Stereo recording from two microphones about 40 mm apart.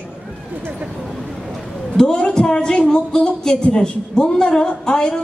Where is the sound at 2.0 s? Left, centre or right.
Left.